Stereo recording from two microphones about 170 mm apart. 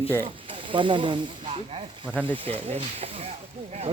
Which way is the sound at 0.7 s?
30° right (ahead or behind).